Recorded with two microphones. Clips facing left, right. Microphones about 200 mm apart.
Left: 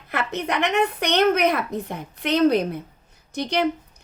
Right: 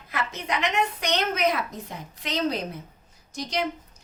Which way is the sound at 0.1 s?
65° left (ahead or behind).